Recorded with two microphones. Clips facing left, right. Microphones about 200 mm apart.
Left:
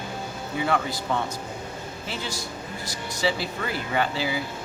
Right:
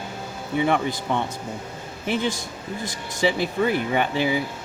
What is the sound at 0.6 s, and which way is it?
Speech, 20° right (ahead or behind).